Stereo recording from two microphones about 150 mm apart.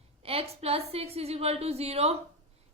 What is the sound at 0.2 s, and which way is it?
A woman's voice, 40° right (ahead or behind).